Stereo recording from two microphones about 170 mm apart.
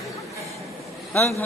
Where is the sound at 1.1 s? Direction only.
10° left (ahead or behind).